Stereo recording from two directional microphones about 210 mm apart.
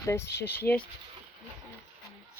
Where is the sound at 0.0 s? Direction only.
15° left (ahead or behind).